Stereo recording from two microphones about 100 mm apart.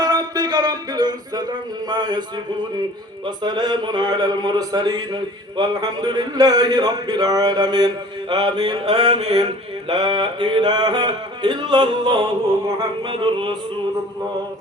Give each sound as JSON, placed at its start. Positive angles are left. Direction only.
{"t": 0.0, "sound": "music", "side_deg": -40}
{"t": 3.2, "sound": "speech", "side_deg": -45}
{"t": 8.8, "sound": "mantra", "side_deg": -90}
{"t": 9.9, "sound": "speech", "side_deg": -50}
{"t": 12.5, "sound": "music", "side_deg": -30}
{"t": 13.1, "sound": "a sound", "side_deg": -60}